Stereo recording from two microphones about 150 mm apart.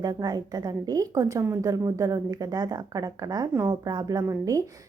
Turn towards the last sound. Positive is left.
turn(degrees=-20)  # may be behind; listen again after turning